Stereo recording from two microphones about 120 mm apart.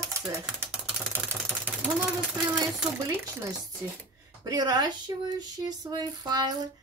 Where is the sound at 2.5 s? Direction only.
5° right (ahead or behind).